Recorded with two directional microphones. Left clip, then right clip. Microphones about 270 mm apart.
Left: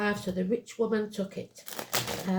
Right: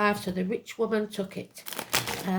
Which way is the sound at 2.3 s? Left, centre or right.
Right.